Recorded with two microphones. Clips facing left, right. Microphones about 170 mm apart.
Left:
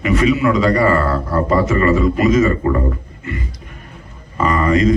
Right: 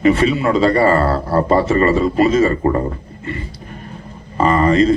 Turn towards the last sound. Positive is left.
turn(degrees=-30)  # may be behind; listen again after turning